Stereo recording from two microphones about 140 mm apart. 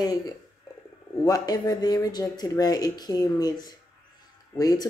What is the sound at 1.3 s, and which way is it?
Speech, 30° left (ahead or behind).